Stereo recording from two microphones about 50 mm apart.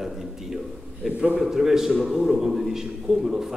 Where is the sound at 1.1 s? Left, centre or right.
Right.